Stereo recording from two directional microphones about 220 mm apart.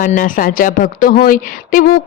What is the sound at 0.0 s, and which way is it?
Speech, 40° left (ahead or behind).